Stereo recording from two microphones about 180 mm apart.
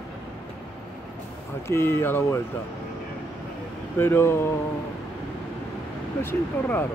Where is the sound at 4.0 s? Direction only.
15° left (ahead or behind).